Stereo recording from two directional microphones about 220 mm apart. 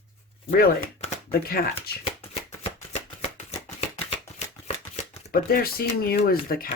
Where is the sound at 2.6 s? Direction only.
25° left (ahead or behind).